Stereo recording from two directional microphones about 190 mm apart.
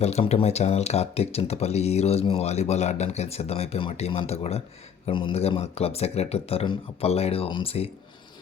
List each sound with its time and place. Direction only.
0.0 s speech: 35° left (ahead or behind)